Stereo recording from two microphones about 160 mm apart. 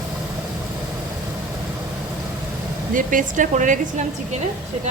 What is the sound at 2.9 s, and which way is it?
Speech, 55° right (ahead or behind).